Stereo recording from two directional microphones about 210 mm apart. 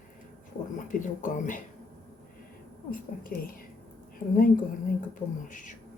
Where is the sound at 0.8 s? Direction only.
40° left (ahead or behind).